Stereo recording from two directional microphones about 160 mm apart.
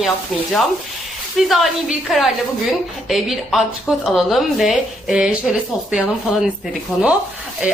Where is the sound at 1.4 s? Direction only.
Centre (ahead or behind).